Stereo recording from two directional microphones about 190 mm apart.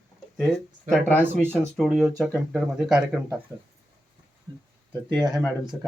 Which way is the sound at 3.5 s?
15° left (ahead or behind).